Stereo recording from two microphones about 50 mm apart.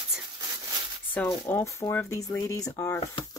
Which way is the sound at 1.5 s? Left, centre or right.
Left.